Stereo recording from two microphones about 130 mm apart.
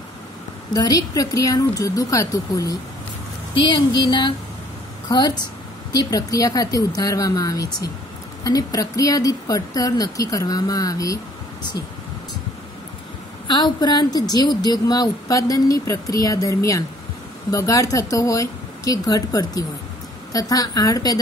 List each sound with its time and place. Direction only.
0.7 s a woman's voice: 30° left (ahead or behind)
3.5 s a sound: 35° left (ahead or behind)
5.0 s a woman's voice: 30° left (ahead or behind)
13.5 s a woman's voice: 35° left (ahead or behind)